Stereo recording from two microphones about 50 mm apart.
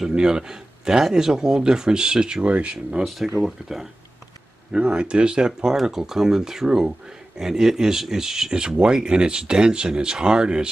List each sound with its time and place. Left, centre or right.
0.1 s speech: centre
2.4 s speech: right
2.7 s speech: centre
3.3 s speech: centre
4.7 s speech: right